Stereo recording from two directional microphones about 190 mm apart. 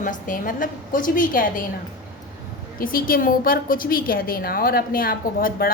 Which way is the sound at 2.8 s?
50° left (ahead or behind).